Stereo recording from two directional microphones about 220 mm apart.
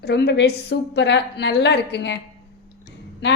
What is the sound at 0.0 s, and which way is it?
A woman's voice, 50° left (ahead or behind).